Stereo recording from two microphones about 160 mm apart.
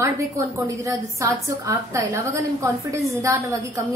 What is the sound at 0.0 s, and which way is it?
A woman's voice, 20° right (ahead or behind).